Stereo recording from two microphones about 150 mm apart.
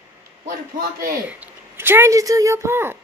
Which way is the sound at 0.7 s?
75° right (ahead or behind).